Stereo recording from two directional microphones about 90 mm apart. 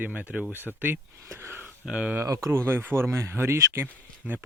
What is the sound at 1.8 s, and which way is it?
Speech, 10° right (ahead or behind).